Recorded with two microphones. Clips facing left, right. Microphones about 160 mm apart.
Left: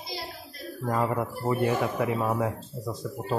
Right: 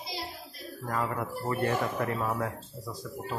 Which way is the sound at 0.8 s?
20° left (ahead or behind).